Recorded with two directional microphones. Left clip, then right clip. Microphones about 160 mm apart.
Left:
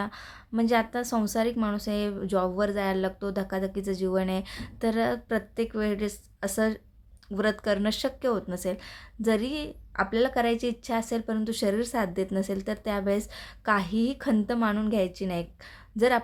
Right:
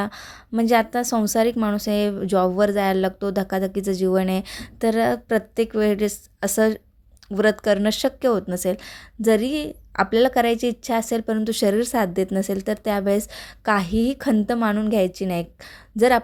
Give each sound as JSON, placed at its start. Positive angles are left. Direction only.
{"t": 0.0, "sound": "speech", "side_deg": -45}